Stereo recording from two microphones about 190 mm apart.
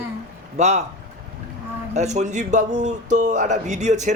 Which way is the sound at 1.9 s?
35° right (ahead or behind).